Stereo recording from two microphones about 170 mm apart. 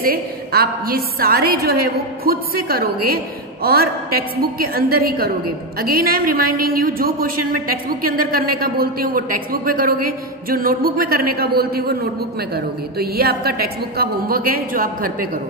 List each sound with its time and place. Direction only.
0.0 s a woman's voice: 60° right (ahead or behind)